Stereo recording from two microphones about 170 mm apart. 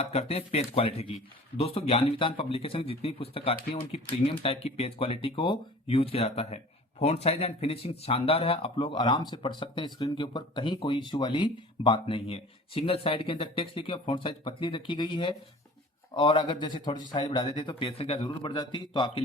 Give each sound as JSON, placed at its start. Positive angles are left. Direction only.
{"t": 0.0, "sound": "speech", "side_deg": 35}